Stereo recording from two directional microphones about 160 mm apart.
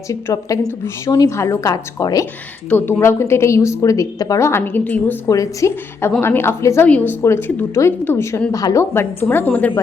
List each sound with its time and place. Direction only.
0.1 s a woman's voice: 20° left (ahead or behind)